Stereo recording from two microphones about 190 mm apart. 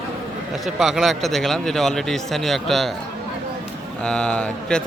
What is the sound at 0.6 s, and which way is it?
A man's voice, centre (ahead or behind).